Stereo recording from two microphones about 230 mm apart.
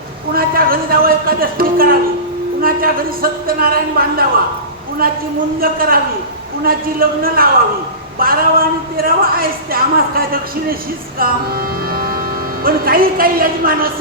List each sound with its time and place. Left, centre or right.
0.3 s a sound: right
2.6 s a man's voice: right
5.5 s a man's voice: right
11.2 s music: right
12.6 s a man's voice: right